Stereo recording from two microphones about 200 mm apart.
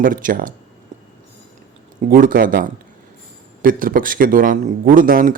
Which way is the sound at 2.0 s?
40° right (ahead or behind).